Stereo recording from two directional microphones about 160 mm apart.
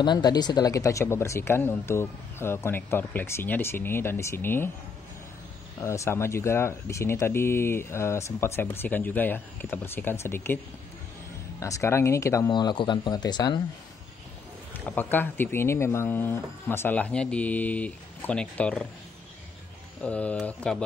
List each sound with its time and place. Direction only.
0.0 s speech: 25° left (ahead or behind)
5.8 s speech: 15° left (ahead or behind)
11.6 s speech: 15° left (ahead or behind)
14.9 s speech: 10° left (ahead or behind)
20.0 s speech: 10° left (ahead or behind)